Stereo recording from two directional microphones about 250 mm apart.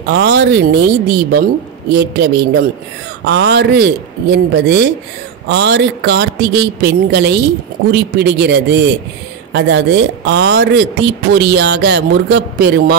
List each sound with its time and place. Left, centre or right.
0.0 s speech: right